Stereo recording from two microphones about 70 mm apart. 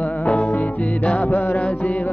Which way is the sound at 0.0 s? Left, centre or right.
Centre.